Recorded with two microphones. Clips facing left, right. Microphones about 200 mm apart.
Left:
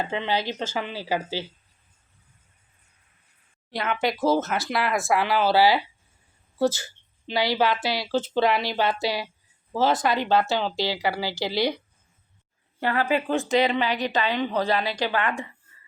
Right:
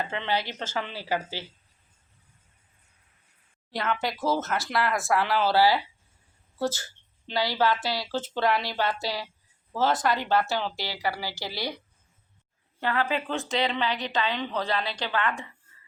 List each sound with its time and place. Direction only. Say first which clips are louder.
0.0 s speech: left 3 dB; 15° left (ahead or behind)
3.7 s a woman's voice: left 3 dB; 15° left (ahead or behind)
11.3 s a woman's voice: left 9 dB; 90° left
12.8 s speech: left 4 dB; 10° left (ahead or behind)